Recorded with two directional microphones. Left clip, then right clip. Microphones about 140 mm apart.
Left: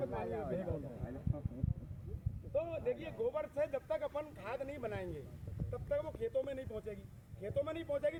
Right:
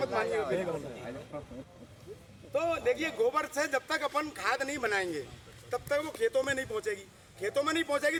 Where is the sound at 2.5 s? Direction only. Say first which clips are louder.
Right 8 dB; 25° right (ahead or behind).